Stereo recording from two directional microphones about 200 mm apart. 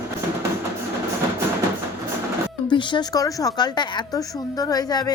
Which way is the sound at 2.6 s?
25° left (ahead or behind).